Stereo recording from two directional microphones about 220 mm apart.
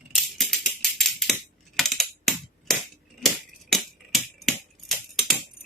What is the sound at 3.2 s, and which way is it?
Tambourine, centre (ahead or behind).